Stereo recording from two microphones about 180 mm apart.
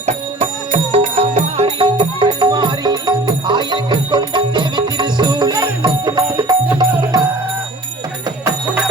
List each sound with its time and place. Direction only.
0.0 s music: 40° right (ahead or behind); by 7.3 s 20° right (ahead or behind)